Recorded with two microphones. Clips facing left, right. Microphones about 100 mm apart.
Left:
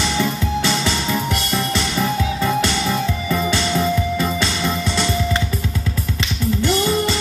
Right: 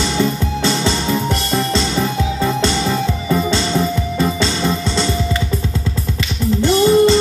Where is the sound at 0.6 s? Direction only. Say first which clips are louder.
Right 6 dB; 20° right (ahead or behind).